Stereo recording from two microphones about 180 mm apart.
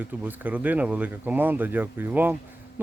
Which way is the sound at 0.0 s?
10° right (ahead or behind).